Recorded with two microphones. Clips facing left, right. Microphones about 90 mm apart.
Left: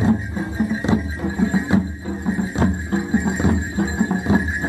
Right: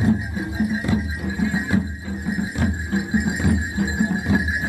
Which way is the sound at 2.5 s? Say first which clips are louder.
Left 3 dB; 30° left (ahead or behind).